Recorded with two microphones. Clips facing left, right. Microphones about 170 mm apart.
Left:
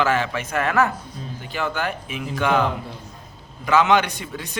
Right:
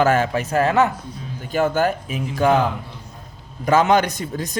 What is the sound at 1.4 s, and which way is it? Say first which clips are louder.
A man's voice: right 7 dB; 45° right (ahead or behind).